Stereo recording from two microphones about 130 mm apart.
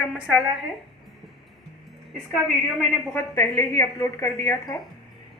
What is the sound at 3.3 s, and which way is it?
Speech, 20° left (ahead or behind).